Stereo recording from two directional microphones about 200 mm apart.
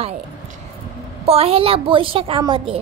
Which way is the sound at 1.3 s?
30° right (ahead or behind).